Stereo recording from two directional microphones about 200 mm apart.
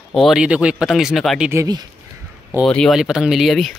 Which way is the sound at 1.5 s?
15° right (ahead or behind).